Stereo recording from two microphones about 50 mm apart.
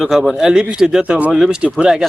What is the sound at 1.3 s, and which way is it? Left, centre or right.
Speech, centre.